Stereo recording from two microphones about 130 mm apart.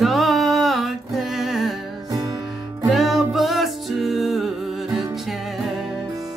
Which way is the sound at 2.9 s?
Centre (ahead or behind).